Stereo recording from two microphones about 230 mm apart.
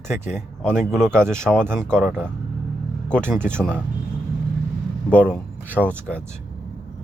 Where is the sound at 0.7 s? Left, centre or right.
Centre.